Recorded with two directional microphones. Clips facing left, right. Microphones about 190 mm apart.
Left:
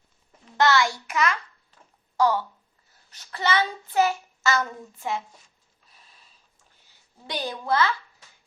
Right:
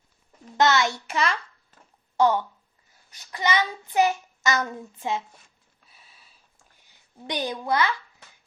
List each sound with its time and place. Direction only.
0.5 s a child's voice: 20° right (ahead or behind)
3.1 s child singing: 15° right (ahead or behind)
7.3 s child singing: 20° right (ahead or behind)